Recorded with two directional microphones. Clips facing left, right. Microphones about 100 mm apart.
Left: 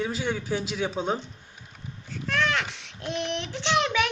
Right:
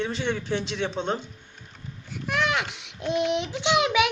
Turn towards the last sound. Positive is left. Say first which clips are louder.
# right 3 dB
turn(degrees=-15)  # may be behind; listen again after turning